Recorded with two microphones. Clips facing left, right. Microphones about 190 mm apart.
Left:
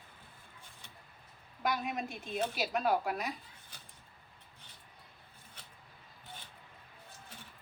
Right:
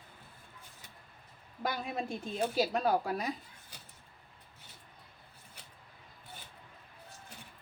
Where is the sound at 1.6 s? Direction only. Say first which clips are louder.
Left 1 dB; 30° right (ahead or behind).